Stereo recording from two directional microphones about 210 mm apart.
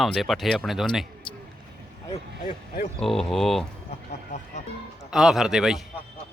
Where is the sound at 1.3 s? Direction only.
25° left (ahead or behind).